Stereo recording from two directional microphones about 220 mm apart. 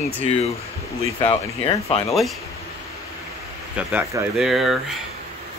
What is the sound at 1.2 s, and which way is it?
Speech, 25° left (ahead or behind).